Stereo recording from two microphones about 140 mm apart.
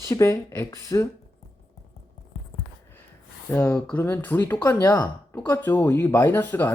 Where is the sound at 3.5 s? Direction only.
15° left (ahead or behind).